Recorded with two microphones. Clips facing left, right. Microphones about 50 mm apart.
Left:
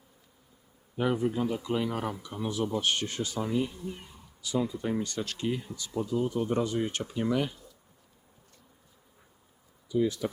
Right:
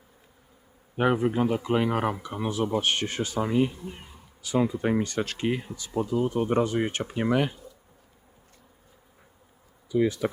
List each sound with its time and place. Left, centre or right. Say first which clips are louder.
0.9 s speech: right 5 dB; right
3.8 s a sound: left 1 dB; right
4.4 s speech: right 5 dB; right
9.9 s speech: right 3 dB; right